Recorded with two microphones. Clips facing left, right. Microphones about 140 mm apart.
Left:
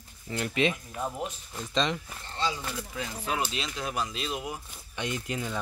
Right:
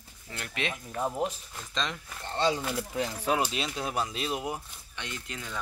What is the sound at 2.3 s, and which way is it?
Speech, 60° right (ahead or behind).